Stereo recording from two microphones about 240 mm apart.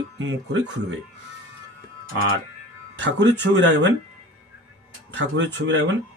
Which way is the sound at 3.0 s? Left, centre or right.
Right.